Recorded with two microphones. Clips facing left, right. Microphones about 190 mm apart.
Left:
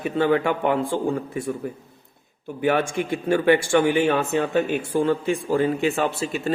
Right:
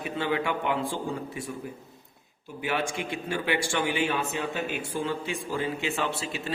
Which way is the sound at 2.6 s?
50° left (ahead or behind).